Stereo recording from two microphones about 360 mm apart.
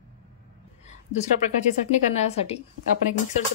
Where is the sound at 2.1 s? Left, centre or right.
Centre.